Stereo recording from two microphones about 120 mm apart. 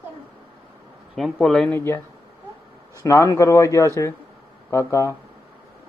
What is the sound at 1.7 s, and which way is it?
Speech, 20° left (ahead or behind).